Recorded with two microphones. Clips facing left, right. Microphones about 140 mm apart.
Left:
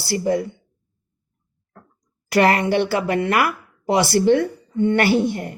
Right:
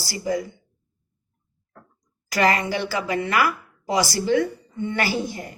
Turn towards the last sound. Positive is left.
turn(degrees=60)  # may be behind; listen again after turning